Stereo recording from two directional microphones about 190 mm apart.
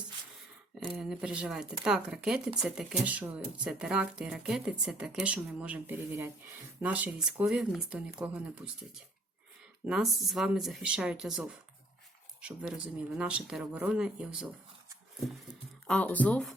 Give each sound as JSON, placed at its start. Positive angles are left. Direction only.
{"t": 0.9, "sound": "speech", "side_deg": -5}
{"t": 9.8, "sound": "speech", "side_deg": 0}
{"t": 15.9, "sound": "speech", "side_deg": 10}